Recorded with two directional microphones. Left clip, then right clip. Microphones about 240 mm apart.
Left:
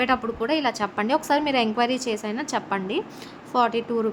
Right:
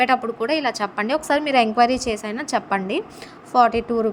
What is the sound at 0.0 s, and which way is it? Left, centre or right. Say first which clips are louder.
A woman's voice: right 4 dB; centre.